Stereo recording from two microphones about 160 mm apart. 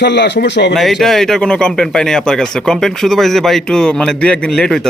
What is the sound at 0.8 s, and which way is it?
Speech, centre (ahead or behind).